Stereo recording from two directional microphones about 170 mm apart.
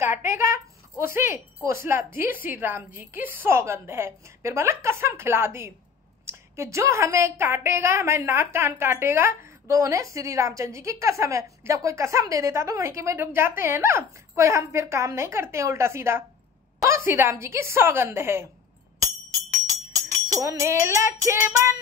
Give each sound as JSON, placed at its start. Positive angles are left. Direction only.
{"t": 0.3, "sound": "a woman's voice", "side_deg": -15}
{"t": 20.3, "sound": "a woman's voice", "side_deg": -20}